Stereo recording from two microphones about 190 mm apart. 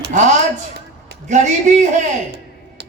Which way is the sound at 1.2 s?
40° right (ahead or behind).